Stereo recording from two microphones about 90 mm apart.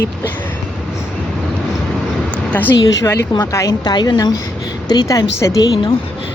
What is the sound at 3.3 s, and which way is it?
Speech, 70° left (ahead or behind).